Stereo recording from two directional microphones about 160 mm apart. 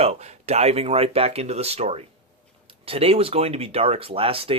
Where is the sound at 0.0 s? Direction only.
40° right (ahead or behind).